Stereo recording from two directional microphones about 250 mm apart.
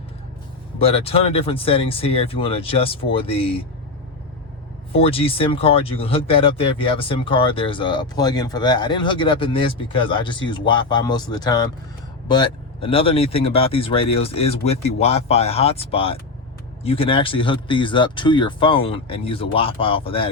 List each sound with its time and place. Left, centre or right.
0.8 s speech: left
4.9 s speech: left